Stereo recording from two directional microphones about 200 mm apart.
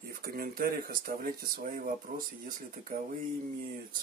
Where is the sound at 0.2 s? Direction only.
45° right (ahead or behind).